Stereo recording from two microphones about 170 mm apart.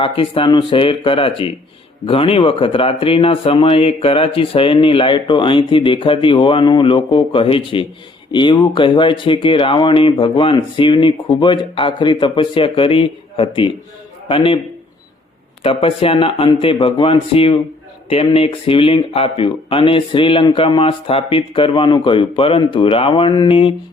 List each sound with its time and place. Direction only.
0.0 s speech: 30° left (ahead or behind)
15.6 s speech: 35° left (ahead or behind)